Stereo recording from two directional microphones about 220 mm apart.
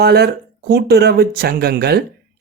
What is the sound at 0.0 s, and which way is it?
Speech, 45° right (ahead or behind).